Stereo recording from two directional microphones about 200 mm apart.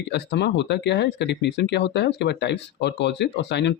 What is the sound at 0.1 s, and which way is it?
Speech, 60° left (ahead or behind).